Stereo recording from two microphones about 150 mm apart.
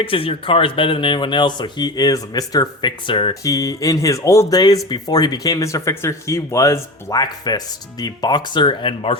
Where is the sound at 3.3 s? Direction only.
20° left (ahead or behind).